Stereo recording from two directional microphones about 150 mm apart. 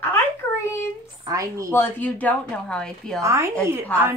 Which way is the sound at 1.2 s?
20° right (ahead or behind).